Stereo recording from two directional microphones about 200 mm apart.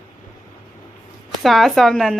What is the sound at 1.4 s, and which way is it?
Speech, centre (ahead or behind).